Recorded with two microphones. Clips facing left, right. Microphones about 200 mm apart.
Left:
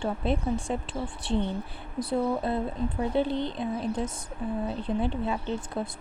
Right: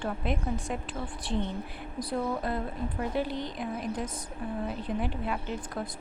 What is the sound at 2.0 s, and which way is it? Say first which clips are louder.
A woman's voice: left 4 dB; 25° left (ahead or behind).